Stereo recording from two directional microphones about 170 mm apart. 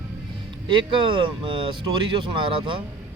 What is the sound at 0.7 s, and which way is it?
Speech, 30° right (ahead or behind).